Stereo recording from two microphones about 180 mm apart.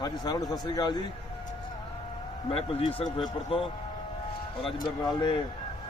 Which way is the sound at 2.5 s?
30° left (ahead or behind).